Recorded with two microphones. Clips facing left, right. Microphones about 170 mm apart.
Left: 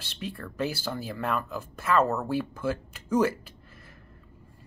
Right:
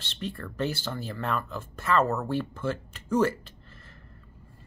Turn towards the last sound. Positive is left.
turn(degrees=10)  # may be behind; listen again after turning